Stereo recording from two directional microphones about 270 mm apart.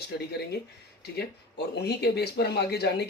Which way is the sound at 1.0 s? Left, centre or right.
Left.